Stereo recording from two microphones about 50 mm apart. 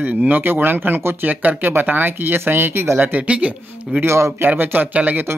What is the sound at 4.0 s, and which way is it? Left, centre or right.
Speech, right.